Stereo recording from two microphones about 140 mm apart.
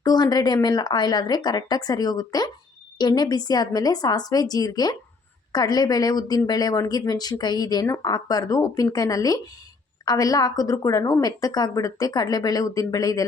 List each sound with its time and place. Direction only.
0.0 s a woman's voice: 30° left (ahead or behind)